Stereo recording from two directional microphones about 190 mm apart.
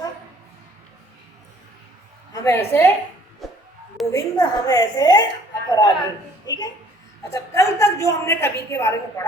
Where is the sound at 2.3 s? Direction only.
15° left (ahead or behind).